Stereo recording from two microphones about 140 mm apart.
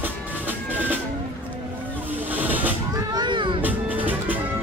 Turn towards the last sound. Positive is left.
turn(degrees=-10)  # may be behind; listen again after turning